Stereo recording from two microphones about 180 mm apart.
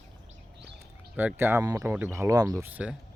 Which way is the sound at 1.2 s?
10° right (ahead or behind).